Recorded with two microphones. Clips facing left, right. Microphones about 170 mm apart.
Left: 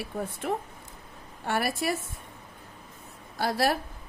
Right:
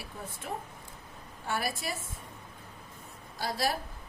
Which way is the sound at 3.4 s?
65° left (ahead or behind).